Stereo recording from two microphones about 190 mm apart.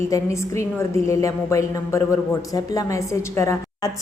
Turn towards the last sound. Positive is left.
turn(degrees=15)  # may be behind; listen again after turning